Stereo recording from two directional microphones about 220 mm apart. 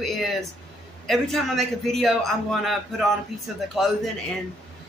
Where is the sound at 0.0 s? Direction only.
Centre (ahead or behind).